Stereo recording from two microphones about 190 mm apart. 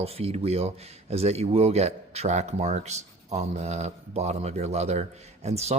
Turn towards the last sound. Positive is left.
turn(degrees=-35)  # may be behind; listen again after turning